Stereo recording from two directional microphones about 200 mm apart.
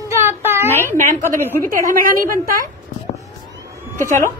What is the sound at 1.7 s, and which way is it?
Speech, 45° right (ahead or behind).